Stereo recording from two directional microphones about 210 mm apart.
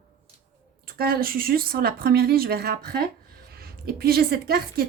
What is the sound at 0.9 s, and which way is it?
A woman's voice, 45° right (ahead or behind).